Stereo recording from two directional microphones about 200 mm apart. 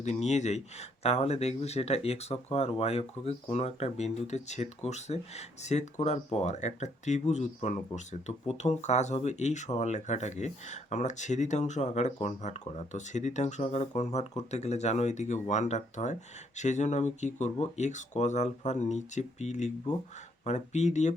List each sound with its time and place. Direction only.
0.0 s speech: 35° left (ahead or behind)